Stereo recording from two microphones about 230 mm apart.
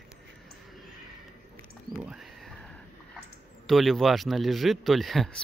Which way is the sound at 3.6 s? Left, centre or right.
Centre.